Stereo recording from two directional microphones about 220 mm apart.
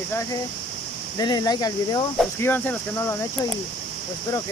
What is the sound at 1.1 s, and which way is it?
Speech, 20° left (ahead or behind).